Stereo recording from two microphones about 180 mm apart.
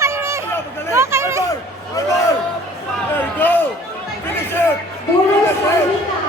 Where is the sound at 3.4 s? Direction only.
10° left (ahead or behind).